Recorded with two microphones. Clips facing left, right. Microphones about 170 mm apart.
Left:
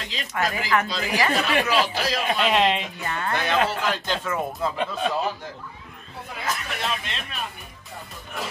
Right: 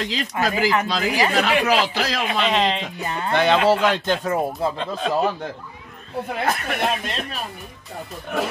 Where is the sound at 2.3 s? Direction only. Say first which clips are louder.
Even; centre (ahead or behind).